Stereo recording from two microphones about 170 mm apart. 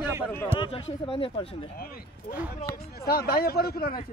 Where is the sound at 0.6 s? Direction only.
35° left (ahead or behind).